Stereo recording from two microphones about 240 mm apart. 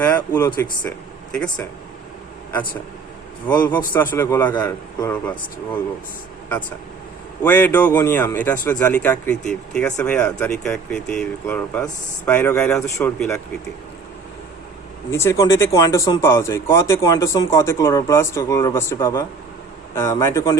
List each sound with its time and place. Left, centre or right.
0.0 s speech: centre
3.5 s speech: centre
7.4 s speech: centre
15.1 s speech: centre